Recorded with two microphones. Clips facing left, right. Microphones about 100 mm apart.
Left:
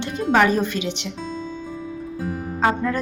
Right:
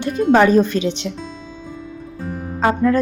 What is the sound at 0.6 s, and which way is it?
Speech, 15° left (ahead or behind).